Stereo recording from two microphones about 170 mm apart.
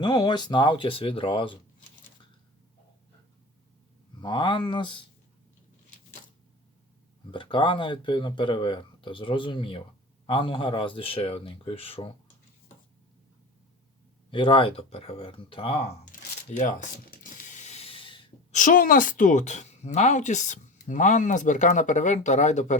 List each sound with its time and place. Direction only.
0.0 s speech: 25° left (ahead or behind)
4.2 s speech: 25° left (ahead or behind)
7.3 s speech: 30° left (ahead or behind)
14.3 s speech: 30° left (ahead or behind)
16.1 s a sound: 55° left (ahead or behind)
16.5 s speech: 45° left (ahead or behind)
17.1 s mechanisms: 50° left (ahead or behind); by 18.2 s 30° left (ahead or behind)
18.5 s speech: 50° left (ahead or behind)